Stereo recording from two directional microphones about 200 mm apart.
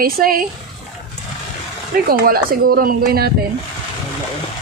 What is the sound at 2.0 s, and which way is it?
Speech, 50° right (ahead or behind).